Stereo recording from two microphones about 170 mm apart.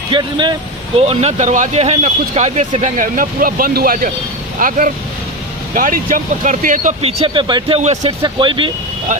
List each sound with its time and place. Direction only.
0.1 s speech: 25° right (ahead or behind); by 6.9 s 50° right (ahead or behind)
7.0 s speech: 35° right (ahead or behind)
7.8 s speech: 40° right (ahead or behind)